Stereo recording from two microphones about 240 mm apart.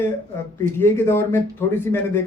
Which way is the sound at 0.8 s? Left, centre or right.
Centre.